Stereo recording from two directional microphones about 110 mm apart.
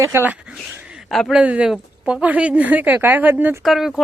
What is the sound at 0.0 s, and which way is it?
Speech, 25° right (ahead or behind).